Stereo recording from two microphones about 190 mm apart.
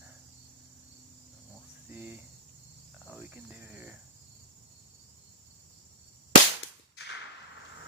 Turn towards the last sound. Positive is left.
turn(degrees=65)  # may be behind; listen again after turning